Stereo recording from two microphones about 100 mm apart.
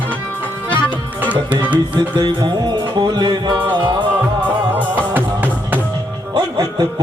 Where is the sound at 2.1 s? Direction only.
45° right (ahead or behind).